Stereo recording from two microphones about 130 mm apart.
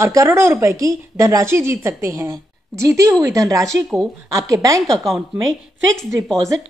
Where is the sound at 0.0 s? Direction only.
25° right (ahead or behind).